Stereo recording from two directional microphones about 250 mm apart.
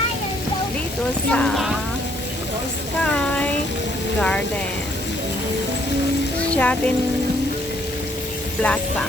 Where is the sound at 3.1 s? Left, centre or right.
Centre.